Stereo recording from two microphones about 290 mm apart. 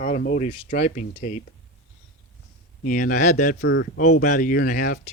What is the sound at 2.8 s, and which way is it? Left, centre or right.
Speech, left.